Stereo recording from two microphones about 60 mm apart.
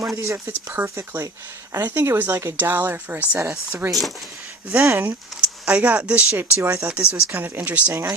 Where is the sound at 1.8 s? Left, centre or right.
Right.